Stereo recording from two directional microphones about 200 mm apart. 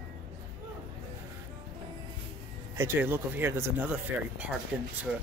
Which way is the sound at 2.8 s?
10° right (ahead or behind).